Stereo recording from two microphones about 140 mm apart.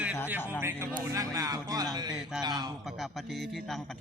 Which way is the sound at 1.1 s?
25° right (ahead or behind).